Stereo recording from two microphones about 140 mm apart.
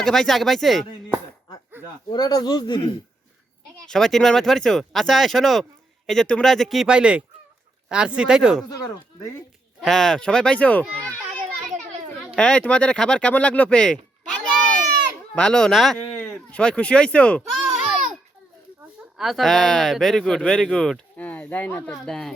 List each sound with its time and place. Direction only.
0.0 s speech: 5° left (ahead or behind)
2.0 s speech: 30° left (ahead or behind)
3.8 s speech: 5° left (ahead or behind)
9.8 s speech: 5° left (ahead or behind)
12.4 s speech: 5° left (ahead or behind)
15.4 s speech: 5° left (ahead or behind)
17.6 s babbling: 5° right (ahead or behind)
19.1 s speech: centre (ahead or behind)